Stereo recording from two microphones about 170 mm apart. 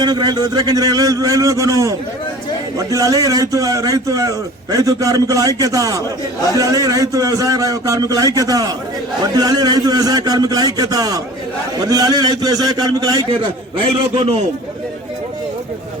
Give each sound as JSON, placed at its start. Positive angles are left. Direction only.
{"t": 0.0, "sound": "a man's voice", "side_deg": -25}
{"t": 13.3, "sound": "a man's voice", "side_deg": -35}